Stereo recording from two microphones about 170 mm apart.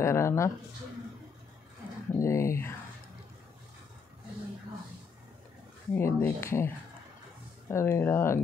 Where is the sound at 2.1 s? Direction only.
15° left (ahead or behind).